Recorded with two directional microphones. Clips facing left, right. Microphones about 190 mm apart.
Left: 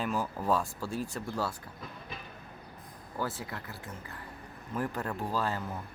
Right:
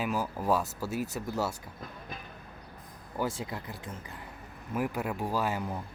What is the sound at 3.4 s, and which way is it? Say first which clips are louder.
Speech: right 3 dB; 20° right (ahead or behind).